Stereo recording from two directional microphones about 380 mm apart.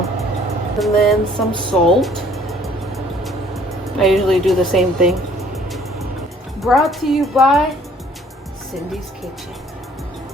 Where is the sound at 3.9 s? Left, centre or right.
Centre.